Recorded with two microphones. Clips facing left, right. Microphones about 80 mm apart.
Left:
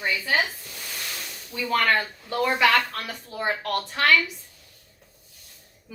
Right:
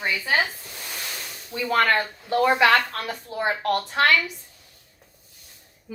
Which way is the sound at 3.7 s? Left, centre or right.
Right.